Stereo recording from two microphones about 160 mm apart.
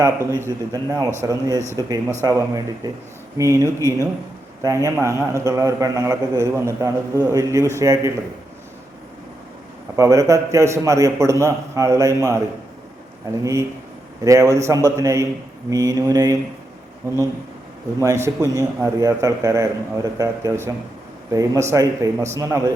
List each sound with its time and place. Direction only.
0.0 s a man's voice: 15° right (ahead or behind)
9.9 s a man's voice: 20° right (ahead or behind)
13.4 s a man's voice: 20° right (ahead or behind)
18.0 s a man's voice: 15° right (ahead or behind)